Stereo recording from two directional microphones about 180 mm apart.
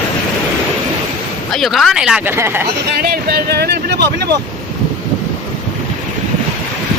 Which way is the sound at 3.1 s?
60° right (ahead or behind).